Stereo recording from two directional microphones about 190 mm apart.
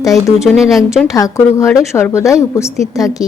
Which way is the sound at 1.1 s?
15° left (ahead or behind).